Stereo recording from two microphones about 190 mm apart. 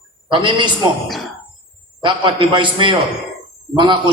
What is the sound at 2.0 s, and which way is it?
A man's voice, 25° right (ahead or behind).